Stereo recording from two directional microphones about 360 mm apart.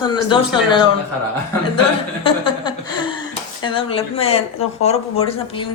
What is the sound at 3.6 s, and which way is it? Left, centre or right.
Speech, centre.